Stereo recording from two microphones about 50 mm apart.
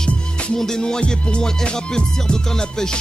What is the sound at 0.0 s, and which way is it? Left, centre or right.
Music, centre.